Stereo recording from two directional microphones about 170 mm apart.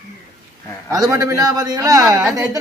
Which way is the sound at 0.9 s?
20° right (ahead or behind).